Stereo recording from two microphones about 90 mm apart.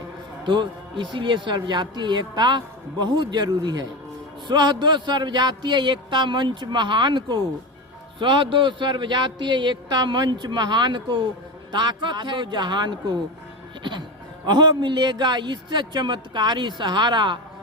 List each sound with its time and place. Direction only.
0.4 s a man's voice: 60° right (ahead or behind)
14.4 s speech: 55° right (ahead or behind)